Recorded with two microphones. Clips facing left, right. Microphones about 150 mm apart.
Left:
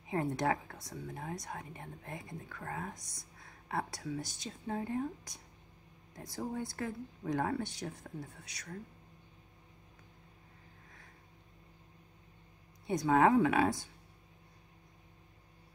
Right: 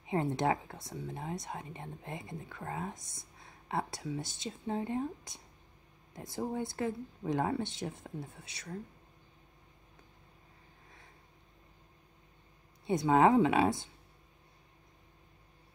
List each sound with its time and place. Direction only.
0.0 s a woman's voice: 25° right (ahead or behind)
12.8 s a woman's voice: 25° right (ahead or behind)